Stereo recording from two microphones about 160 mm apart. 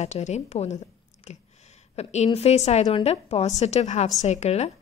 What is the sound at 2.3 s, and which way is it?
A woman's voice, 40° left (ahead or behind).